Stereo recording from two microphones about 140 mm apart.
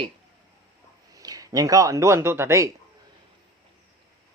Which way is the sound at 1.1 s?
25° right (ahead or behind).